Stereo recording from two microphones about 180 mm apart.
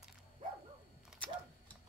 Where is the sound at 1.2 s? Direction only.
5° left (ahead or behind).